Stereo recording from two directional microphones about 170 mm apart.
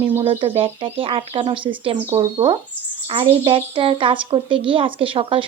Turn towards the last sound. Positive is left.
turn(degrees=-30)  # may be behind; listen again after turning